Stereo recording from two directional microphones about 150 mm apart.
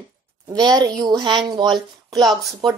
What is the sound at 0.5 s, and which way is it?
Speech, 25° right (ahead or behind).